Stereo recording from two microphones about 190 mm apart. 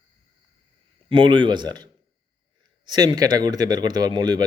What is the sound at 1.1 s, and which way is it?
Speech, 25° right (ahead or behind).